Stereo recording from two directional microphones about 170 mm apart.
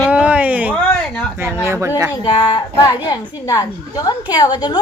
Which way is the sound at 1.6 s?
15° right (ahead or behind).